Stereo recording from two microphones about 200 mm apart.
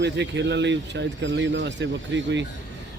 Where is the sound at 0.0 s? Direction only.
60° right (ahead or behind).